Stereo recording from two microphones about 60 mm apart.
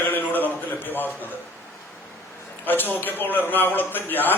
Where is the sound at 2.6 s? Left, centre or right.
Left.